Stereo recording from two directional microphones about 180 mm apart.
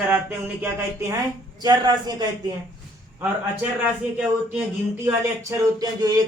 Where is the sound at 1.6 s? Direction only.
20° right (ahead or behind).